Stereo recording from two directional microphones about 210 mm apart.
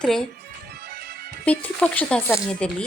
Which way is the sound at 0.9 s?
50° right (ahead or behind).